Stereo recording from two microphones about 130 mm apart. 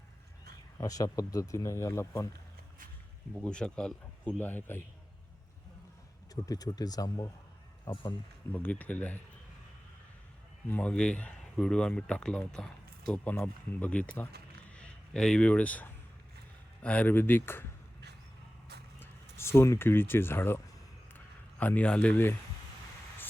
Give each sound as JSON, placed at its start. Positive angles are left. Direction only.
{"t": 0.8, "sound": "speech", "side_deg": 25}
{"t": 3.3, "sound": "speech", "side_deg": 5}
{"t": 6.3, "sound": "speech", "side_deg": 30}
{"t": 10.7, "sound": "speech", "side_deg": 10}
{"t": 18.9, "sound": "speech", "side_deg": 20}
{"t": 21.6, "sound": "speech", "side_deg": 10}